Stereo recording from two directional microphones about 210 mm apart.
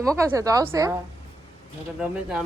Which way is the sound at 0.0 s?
15° right (ahead or behind).